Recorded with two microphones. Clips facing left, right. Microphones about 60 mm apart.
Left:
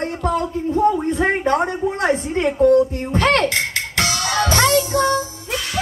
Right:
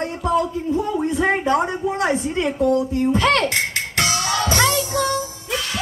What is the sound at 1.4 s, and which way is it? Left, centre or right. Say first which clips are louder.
A woman's voice: left 1 dB; left.